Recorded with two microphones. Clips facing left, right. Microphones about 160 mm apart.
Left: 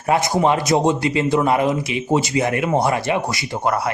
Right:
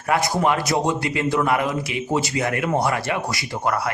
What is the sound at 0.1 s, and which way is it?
A man's voice, 25° left (ahead or behind).